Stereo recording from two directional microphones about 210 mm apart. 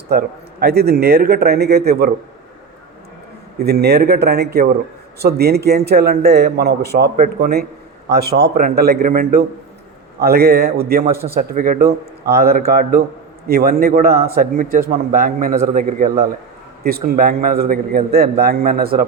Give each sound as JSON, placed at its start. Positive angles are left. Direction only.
{"t": 0.1, "sound": "a man's voice", "side_deg": -50}
{"t": 3.6, "sound": "a man's voice", "side_deg": -50}